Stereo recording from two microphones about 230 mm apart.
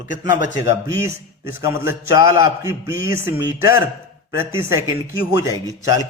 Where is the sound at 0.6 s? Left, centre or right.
Centre.